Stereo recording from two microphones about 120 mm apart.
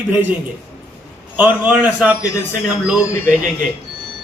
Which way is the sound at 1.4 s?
10° right (ahead or behind).